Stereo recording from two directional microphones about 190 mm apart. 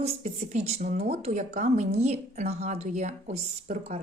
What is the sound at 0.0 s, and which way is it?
Speech, 35° right (ahead or behind).